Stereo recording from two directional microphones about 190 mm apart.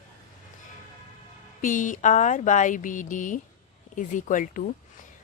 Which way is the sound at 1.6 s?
45° left (ahead or behind).